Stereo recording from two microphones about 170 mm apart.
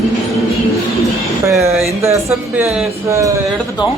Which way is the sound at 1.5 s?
15° right (ahead or behind).